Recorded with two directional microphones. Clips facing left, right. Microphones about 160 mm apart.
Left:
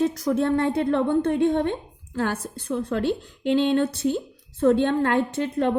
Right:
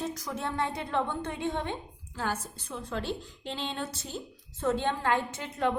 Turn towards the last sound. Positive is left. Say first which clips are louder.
# left 8 dB
turn(degrees=60)  # may be behind; listen again after turning